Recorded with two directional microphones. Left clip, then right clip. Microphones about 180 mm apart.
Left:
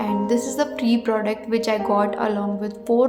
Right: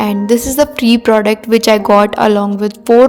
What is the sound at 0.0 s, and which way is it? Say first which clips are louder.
A woman's voice: right 9 dB; 50° right (ahead or behind).